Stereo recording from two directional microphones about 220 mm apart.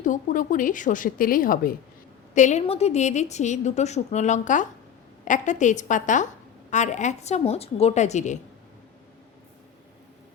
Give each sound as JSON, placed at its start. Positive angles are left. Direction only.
{"t": 0.0, "sound": "a woman's voice", "side_deg": 35}